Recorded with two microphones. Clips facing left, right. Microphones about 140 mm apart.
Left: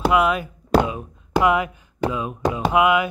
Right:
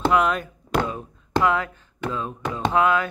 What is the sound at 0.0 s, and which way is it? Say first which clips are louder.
Speech: left 2 dB; 5° left (ahead or behind).